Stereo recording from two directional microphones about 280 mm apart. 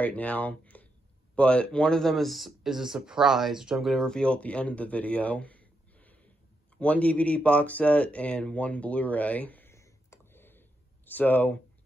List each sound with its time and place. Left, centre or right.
0.0 s speech: centre